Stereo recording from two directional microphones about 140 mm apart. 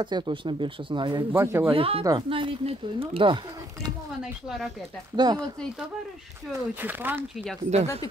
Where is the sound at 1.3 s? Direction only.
20° right (ahead or behind).